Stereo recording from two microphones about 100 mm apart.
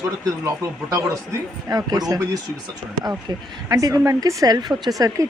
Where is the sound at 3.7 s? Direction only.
35° right (ahead or behind).